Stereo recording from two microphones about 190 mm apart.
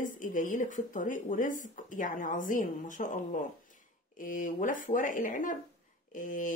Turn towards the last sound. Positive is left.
turn(degrees=45)  # may be behind; listen again after turning